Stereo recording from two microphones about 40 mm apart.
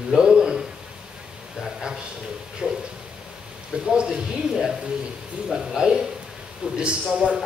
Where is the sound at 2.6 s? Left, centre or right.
Right.